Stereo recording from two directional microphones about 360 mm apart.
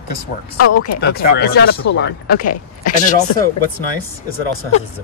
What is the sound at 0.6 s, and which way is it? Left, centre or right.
Speech, left.